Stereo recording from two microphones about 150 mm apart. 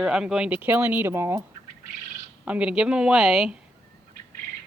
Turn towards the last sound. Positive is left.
turn(degrees=0)  # may be behind; listen again after turning